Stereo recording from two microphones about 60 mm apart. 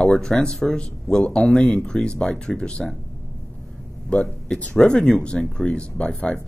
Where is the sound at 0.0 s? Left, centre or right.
Centre.